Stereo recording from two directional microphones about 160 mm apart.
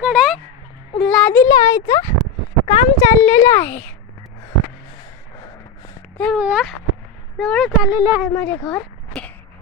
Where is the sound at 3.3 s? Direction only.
15° left (ahead or behind).